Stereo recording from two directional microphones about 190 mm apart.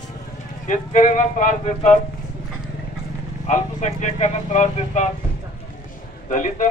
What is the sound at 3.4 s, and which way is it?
Speech, 40° left (ahead or behind).